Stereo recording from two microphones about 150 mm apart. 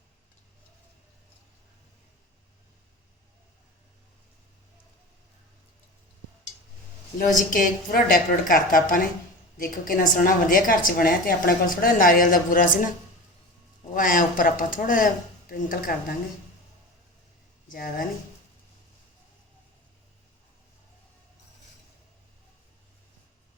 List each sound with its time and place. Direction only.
7.5 s a woman's voice: 65° left (ahead or behind)
13.9 s speech: 65° left (ahead or behind)
17.7 s a woman's voice: 65° left (ahead or behind)